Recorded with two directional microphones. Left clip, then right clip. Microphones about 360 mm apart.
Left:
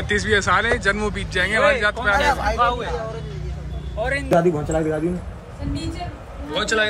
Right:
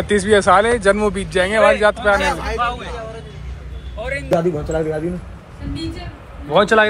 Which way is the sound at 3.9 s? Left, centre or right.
Left.